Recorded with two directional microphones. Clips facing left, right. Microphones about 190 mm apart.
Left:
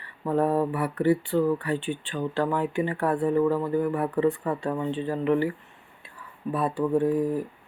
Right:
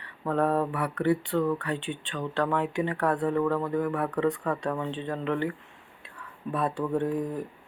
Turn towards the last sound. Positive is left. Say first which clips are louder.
# left 5 dB
turn(degrees=5)  # may be behind; listen again after turning